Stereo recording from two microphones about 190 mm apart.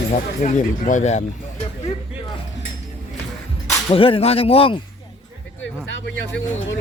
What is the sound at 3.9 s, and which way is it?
Speech, 30° left (ahead or behind).